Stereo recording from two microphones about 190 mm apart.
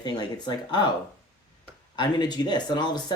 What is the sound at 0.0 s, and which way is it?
Speech, 25° left (ahead or behind).